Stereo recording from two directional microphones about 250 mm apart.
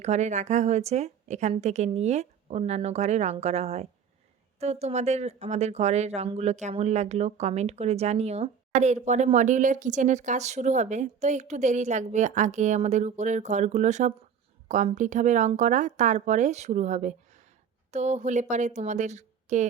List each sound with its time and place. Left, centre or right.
0.0 s speech: right